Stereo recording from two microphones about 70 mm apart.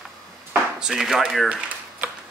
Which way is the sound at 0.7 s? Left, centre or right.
Centre.